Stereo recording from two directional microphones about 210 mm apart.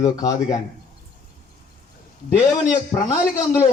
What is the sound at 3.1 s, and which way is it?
Speech, 15° left (ahead or behind).